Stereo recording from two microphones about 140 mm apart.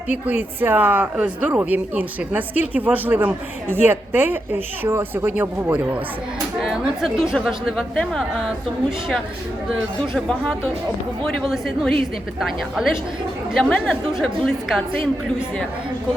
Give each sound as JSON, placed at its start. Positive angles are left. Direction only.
{"t": 0.1, "sound": "speech", "side_deg": -15}
{"t": 6.6, "sound": "a woman's voice", "side_deg": 0}